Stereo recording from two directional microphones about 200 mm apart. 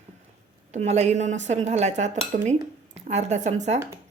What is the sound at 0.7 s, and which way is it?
A woman's voice, 35° right (ahead or behind).